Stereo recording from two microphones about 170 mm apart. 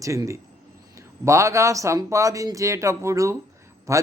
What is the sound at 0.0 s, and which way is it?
A man's voice, 20° right (ahead or behind).